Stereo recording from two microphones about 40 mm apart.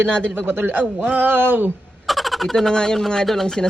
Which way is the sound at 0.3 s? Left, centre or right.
Right.